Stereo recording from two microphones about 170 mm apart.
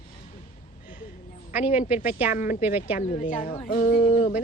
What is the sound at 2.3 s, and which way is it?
Speech, 50° left (ahead or behind).